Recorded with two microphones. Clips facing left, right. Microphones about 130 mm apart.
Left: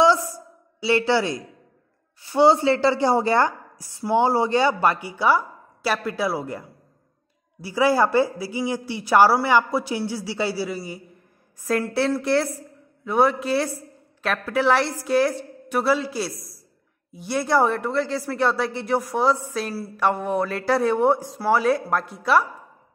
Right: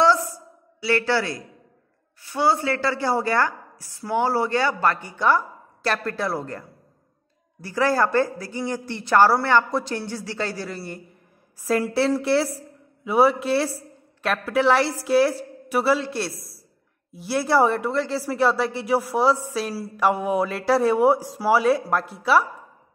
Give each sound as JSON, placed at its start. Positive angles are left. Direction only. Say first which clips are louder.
{"t": 0.7, "sound": "a woman's voice", "louder": "left 2 dB", "side_deg": 20}